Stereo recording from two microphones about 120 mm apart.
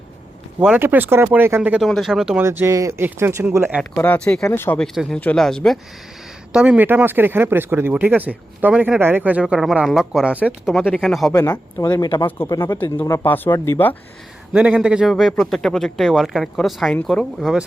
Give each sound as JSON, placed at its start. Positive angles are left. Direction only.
{"t": 0.8, "sound": "speech", "side_deg": -15}
{"t": 1.8, "sound": "speech", "side_deg": 0}
{"t": 2.4, "sound": "speech", "side_deg": -25}
{"t": 3.9, "sound": "speech", "side_deg": 15}
{"t": 4.4, "sound": "speech", "side_deg": 20}
{"t": 4.9, "sound": "speech", "side_deg": 5}
{"t": 6.5, "sound": "speech", "side_deg": -10}
{"t": 11.3, "sound": "speech", "side_deg": 25}
{"t": 11.9, "sound": "speech", "side_deg": 40}
{"t": 12.6, "sound": "speech", "side_deg": 20}
{"t": 14.5, "sound": "speech", "side_deg": -10}